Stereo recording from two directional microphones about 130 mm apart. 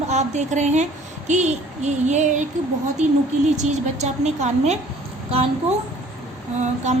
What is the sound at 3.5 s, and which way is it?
A woman's voice, 60° right (ahead or behind).